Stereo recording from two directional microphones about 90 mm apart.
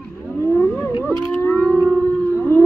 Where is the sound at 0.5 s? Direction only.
25° left (ahead or behind).